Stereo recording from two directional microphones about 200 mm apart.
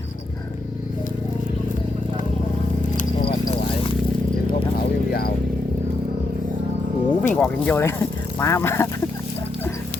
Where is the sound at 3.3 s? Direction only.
25° left (ahead or behind).